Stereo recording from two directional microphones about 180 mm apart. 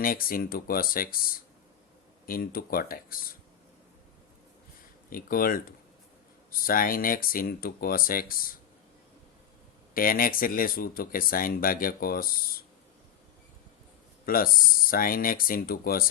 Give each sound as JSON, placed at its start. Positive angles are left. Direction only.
{"t": 0.0, "sound": "speech", "side_deg": 55}
{"t": 2.2, "sound": "speech", "side_deg": 55}
{"t": 5.0, "sound": "speech", "side_deg": 50}
{"t": 9.9, "sound": "speech", "side_deg": 55}
{"t": 14.3, "sound": "speech", "side_deg": 55}